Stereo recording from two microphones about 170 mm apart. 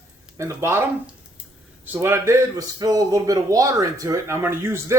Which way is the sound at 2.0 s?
15° right (ahead or behind).